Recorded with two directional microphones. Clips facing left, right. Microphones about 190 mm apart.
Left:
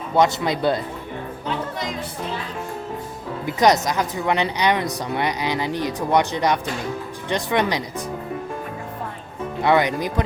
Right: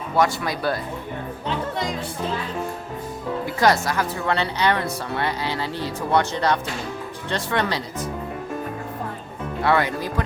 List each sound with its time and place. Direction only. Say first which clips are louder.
0.2 s speech: left 3 dB; 20° left (ahead or behind)
3.4 s speech: left 3 dB; 20° left (ahead or behind)
9.6 s speech: left 3 dB; 15° left (ahead or behind)